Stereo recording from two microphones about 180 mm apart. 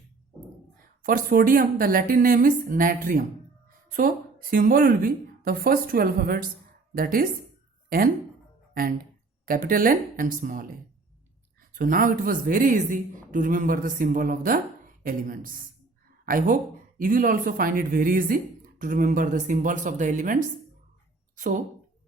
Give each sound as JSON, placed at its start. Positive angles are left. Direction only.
{"t": 1.0, "sound": "a woman's voice", "side_deg": -55}
{"t": 11.7, "sound": "a woman's voice", "side_deg": -50}